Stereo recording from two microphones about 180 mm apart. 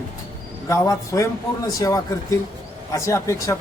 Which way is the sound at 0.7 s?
20° left (ahead or behind).